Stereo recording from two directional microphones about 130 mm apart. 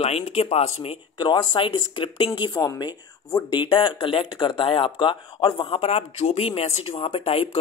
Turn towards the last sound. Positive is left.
turn(degrees=45)  # may be behind; listen again after turning